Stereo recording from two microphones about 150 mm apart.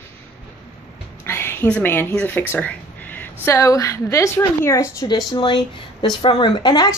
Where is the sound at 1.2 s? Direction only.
15° left (ahead or behind).